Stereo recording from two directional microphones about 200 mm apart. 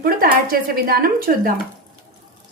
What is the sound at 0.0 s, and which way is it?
A woman's voice, 45° right (ahead or behind).